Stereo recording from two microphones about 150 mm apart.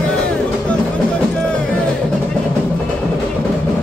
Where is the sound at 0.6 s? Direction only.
5° left (ahead or behind).